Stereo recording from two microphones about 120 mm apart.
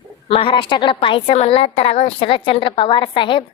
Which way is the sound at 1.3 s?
55° left (ahead or behind).